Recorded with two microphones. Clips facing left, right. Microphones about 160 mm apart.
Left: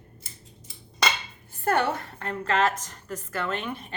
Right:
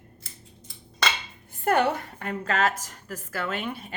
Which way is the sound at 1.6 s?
15° right (ahead or behind).